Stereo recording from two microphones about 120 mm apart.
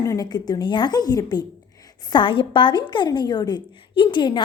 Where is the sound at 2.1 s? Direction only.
45° left (ahead or behind).